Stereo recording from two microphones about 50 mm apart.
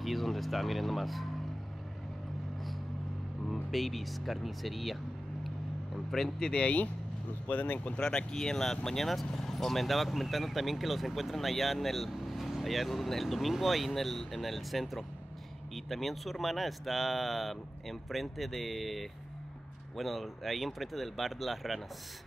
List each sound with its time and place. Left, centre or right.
0.0 s speech: centre
3.7 s speech: centre
6.1 s speech: centre
6.6 s speech: left
8.0 s speech: centre